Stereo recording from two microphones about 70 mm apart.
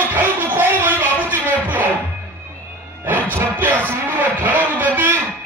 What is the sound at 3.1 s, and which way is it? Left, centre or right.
Music, right.